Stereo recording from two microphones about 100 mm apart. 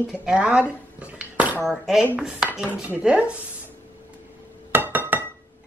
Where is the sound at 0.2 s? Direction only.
10° right (ahead or behind).